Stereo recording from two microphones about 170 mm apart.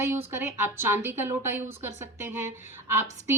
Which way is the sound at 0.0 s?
15° right (ahead or behind).